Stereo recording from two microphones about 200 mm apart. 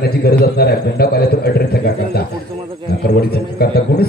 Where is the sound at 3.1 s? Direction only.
50° left (ahead or behind).